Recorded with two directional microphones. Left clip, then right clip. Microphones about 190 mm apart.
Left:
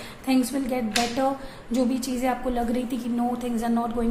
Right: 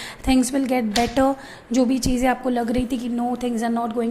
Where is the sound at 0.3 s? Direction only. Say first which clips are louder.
Right 5 dB; 30° right (ahead or behind).